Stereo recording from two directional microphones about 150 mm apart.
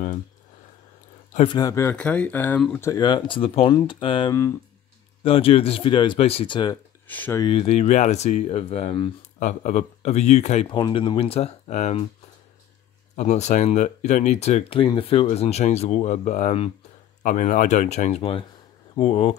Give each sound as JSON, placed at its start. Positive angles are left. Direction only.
{"t": 1.4, "sound": "speech", "side_deg": 30}
{"t": 2.9, "sound": "speech", "side_deg": 30}
{"t": 4.3, "sound": "speech", "side_deg": 15}
{"t": 5.2, "sound": "speech", "side_deg": 40}
{"t": 6.7, "sound": "speech", "side_deg": 10}
{"t": 7.3, "sound": "speech", "side_deg": 35}
{"t": 9.4, "sound": "speech", "side_deg": 55}
{"t": 10.7, "sound": "speech", "side_deg": 35}
{"t": 13.1, "sound": "speech", "side_deg": 50}